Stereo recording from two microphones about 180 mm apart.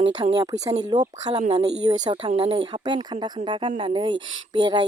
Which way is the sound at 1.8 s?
25° right (ahead or behind).